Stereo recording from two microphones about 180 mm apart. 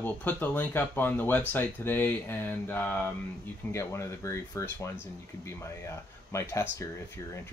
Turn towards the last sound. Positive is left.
turn(degrees=15)  # may be behind; listen again after turning